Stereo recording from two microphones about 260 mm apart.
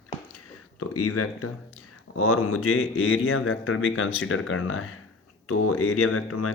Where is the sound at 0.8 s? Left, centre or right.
Left.